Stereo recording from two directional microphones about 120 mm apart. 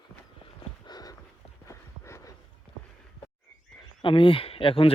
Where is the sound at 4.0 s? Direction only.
45° left (ahead or behind).